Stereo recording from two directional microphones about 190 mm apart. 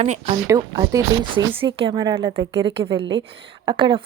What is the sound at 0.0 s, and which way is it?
Speech, 35° right (ahead or behind).